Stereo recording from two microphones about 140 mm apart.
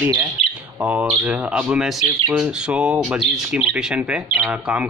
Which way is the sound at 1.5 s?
5° right (ahead or behind).